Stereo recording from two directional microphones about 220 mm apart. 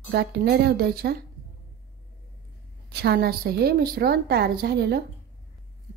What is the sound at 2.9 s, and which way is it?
A woman's voice, 45° right (ahead or behind).